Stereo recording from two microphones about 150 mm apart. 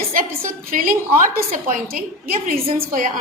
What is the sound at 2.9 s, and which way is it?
Speech, 65° right (ahead or behind).